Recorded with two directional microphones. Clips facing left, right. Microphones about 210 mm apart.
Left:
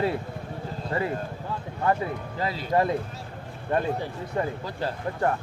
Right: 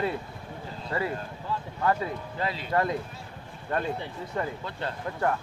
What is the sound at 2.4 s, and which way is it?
Speech, 30° left (ahead or behind).